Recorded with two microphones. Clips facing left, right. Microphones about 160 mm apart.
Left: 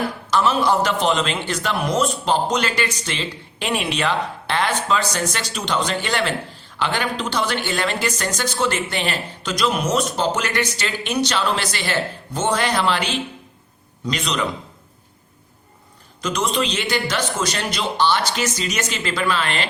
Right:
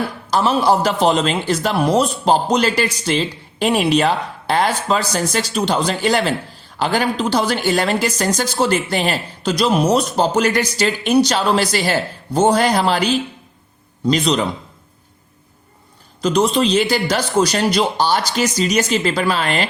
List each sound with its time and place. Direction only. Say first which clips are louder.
0.3 s a man's voice: right 3 dB; 35° right (ahead or behind)
14.1 s a man's voice: right 8 dB; 35° right (ahead or behind)
16.2 s a man's voice: right 6 dB; 35° right (ahead or behind)